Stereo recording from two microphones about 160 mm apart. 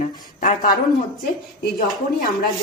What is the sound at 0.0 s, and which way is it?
Speech, 55° left (ahead or behind).